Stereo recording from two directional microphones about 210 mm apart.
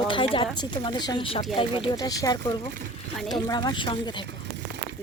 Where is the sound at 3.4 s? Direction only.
20° left (ahead or behind).